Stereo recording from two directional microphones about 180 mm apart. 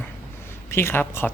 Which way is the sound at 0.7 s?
15° left (ahead or behind).